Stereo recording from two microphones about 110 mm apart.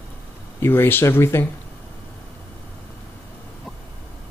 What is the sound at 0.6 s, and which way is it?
Speech, 20° left (ahead or behind).